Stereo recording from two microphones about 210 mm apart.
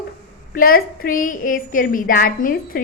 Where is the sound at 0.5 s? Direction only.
45° left (ahead or behind).